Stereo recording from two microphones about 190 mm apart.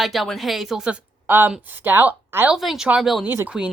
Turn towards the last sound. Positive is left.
turn(degrees=-5)  # may be behind; listen again after turning